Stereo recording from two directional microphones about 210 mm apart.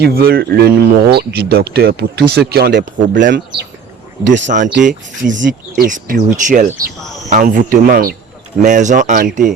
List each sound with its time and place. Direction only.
0.0 s speech: 45° right (ahead or behind)
3.2 s speech: 55° right (ahead or behind)
4.4 s speech: 35° right (ahead or behind)